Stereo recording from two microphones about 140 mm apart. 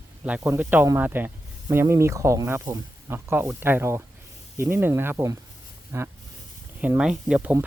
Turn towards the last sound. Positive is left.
turn(degrees=-10)  # may be behind; listen again after turning